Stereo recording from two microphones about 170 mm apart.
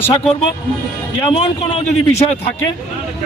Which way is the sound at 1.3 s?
40° left (ahead or behind).